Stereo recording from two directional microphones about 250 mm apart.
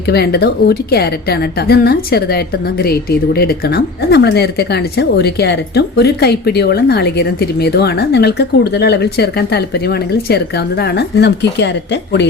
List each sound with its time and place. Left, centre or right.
0.1 s a woman's voice: left